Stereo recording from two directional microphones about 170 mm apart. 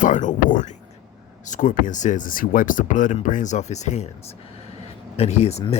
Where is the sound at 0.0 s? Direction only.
50° left (ahead or behind).